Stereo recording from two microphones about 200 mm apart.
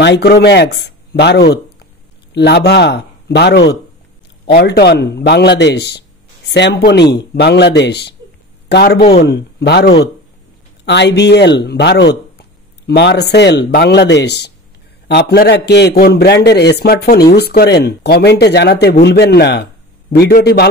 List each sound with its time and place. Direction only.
0.0 s a man's voice: 60° left (ahead or behind)